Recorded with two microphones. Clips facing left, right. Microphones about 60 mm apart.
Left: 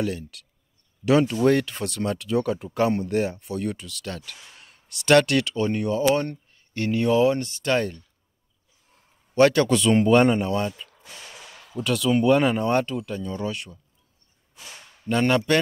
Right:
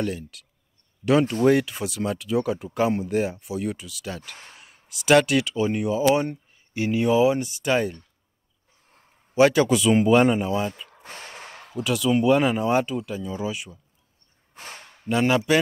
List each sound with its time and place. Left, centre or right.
0.0 s speech: centre
9.3 s speech: centre
11.0 s a sound: right
11.7 s speech: centre
14.5 s a sound: right
15.0 s speech: centre